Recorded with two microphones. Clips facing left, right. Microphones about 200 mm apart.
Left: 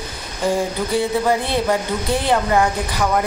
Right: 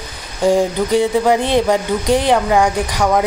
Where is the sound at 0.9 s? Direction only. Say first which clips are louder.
Right 4 dB; 15° right (ahead or behind).